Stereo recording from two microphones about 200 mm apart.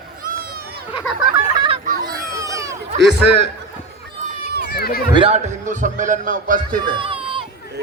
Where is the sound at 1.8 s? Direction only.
45° right (ahead or behind).